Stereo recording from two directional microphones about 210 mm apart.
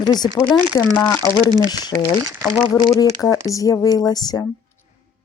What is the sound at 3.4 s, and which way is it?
Speech, 15° left (ahead or behind).